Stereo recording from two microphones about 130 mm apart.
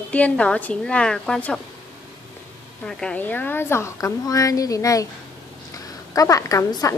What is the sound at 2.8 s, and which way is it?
A woman's voice, 10° left (ahead or behind).